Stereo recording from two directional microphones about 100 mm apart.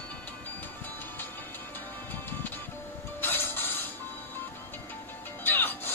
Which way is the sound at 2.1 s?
20° left (ahead or behind).